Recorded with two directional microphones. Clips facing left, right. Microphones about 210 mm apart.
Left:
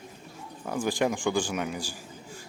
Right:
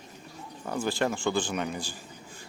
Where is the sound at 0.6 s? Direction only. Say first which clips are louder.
Left 2 dB; 10° left (ahead or behind).